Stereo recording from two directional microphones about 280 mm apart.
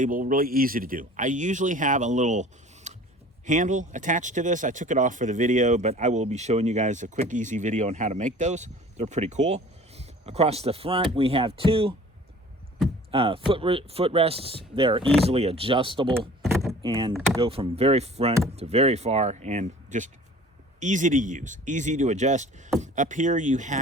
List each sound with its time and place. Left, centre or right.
0.0 s speech: right
13.1 s speech: centre
16.5 s keys jangling: centre
16.9 s speech: centre